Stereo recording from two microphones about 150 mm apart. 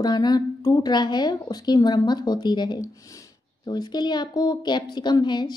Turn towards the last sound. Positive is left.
turn(degrees=30)  # may be behind; listen again after turning